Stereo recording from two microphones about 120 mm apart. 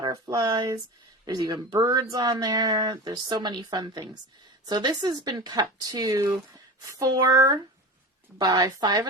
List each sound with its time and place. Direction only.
0.0 s speech: 30° right (ahead or behind)